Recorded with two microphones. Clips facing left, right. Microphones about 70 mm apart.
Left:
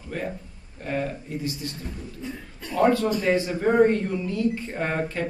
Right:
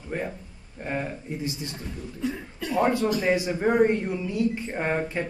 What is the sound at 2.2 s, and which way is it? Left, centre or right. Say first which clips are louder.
Speech: right 10 dB; right.